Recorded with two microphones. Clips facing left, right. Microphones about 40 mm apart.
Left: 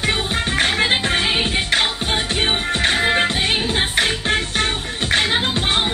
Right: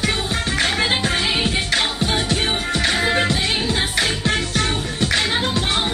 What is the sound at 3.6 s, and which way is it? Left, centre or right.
Music, left.